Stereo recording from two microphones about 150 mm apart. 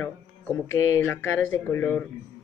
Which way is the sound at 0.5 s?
15° left (ahead or behind).